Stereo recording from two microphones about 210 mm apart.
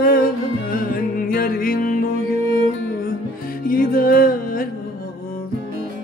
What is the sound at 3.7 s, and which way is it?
Music, 40° left (ahead or behind).